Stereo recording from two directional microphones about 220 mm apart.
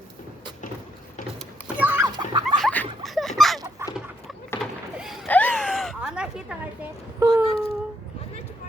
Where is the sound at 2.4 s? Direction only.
5° left (ahead or behind).